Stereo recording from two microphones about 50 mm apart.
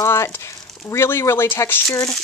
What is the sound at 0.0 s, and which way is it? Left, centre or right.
Speech, left.